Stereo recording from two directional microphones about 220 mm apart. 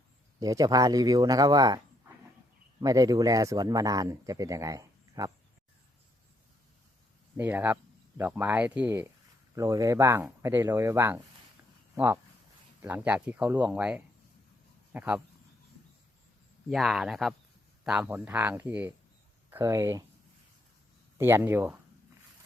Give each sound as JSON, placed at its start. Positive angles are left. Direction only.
{"t": 0.3, "sound": "speech", "side_deg": -15}
{"t": 2.8, "sound": "speech", "side_deg": -15}
{"t": 7.3, "sound": "speech", "side_deg": -10}
{"t": 16.6, "sound": "speech", "side_deg": 0}
{"t": 21.2, "sound": "speech", "side_deg": -10}